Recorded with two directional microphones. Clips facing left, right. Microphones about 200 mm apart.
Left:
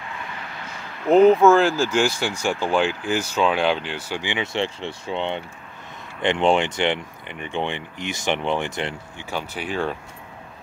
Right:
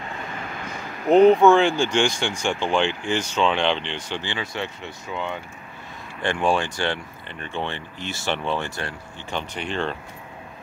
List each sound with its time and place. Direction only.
1.1 s speech: centre (ahead or behind); by 8.9 s 20° left (ahead or behind)
9.2 s speech: 5° left (ahead or behind)